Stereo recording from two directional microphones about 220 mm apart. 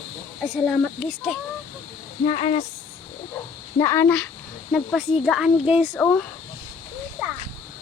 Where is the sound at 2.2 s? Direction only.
25° left (ahead or behind).